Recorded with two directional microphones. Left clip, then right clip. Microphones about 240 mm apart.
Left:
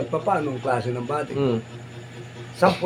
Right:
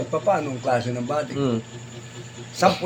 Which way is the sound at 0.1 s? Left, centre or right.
Centre.